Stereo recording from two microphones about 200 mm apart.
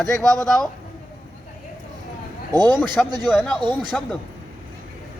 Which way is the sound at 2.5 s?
20° right (ahead or behind).